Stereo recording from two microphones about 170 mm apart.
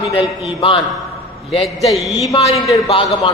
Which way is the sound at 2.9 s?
30° left (ahead or behind).